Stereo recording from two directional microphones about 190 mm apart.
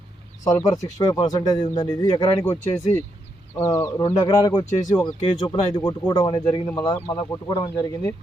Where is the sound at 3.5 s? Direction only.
15° left (ahead or behind).